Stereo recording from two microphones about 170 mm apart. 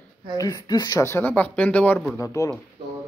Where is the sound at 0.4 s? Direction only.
20° left (ahead or behind).